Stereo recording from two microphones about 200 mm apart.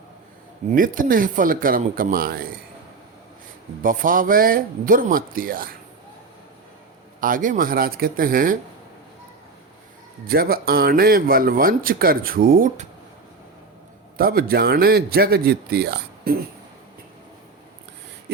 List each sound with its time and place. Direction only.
0.7 s speech: 45° right (ahead or behind)
3.8 s speech: 45° right (ahead or behind)
7.2 s speech: 45° right (ahead or behind)
10.2 s speech: 50° right (ahead or behind)
14.2 s speech: 50° right (ahead or behind)